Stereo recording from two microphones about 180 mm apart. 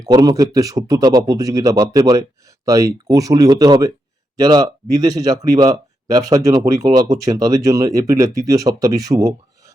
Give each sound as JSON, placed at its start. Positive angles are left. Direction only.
{"t": 0.0, "sound": "speech", "side_deg": -20}